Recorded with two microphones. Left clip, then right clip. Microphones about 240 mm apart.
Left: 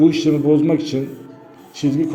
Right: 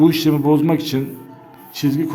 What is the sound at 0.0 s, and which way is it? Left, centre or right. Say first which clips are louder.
A man's voice: even; right.